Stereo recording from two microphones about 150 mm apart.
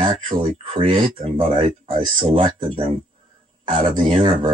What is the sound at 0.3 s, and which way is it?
Speech, 35° right (ahead or behind).